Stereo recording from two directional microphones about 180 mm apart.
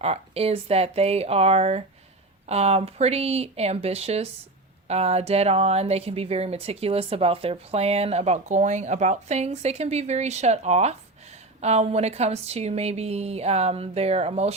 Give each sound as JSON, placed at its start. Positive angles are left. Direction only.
{"t": 0.0, "sound": "a woman's voice", "side_deg": -35}